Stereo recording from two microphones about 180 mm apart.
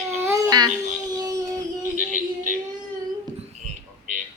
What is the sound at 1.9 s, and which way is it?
Synthetic singing, 45° right (ahead or behind).